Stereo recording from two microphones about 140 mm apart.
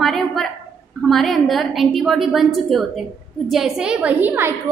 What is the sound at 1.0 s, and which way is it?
A woman's voice, centre (ahead or behind).